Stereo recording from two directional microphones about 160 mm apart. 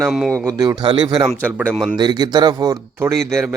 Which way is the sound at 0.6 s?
25° right (ahead or behind).